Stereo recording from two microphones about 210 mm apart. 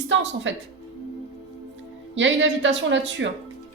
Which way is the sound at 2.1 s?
60° right (ahead or behind).